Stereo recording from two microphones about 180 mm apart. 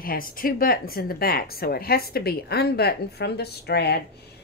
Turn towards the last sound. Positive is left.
turn(degrees=65)  # may be behind; listen again after turning